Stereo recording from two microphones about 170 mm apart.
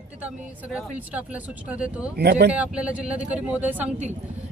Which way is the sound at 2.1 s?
75° right (ahead or behind).